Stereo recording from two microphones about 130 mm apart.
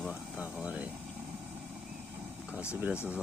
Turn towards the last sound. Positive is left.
turn(degrees=20)  # may be behind; listen again after turning